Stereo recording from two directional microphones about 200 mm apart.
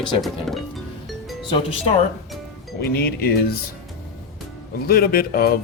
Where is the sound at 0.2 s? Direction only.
Centre (ahead or behind).